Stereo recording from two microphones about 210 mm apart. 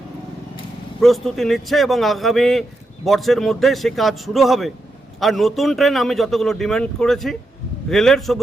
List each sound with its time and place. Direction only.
1.0 s a man's voice: centre (ahead or behind)